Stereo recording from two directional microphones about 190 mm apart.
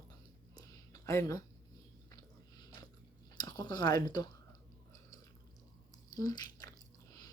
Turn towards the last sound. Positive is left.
turn(degrees=20)  # may be behind; listen again after turning